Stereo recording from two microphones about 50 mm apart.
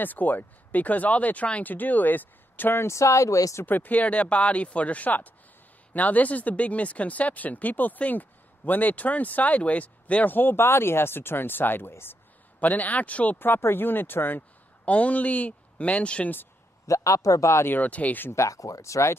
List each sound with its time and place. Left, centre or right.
0.0 s speech: left
2.9 s speech: left
3.6 s speech: left
10.3 s speech: left
12.5 s speech: left
13.4 s speech: left
14.9 s speech: left
16.8 s speech: left
17.6 s speech: left
18.3 s speech: left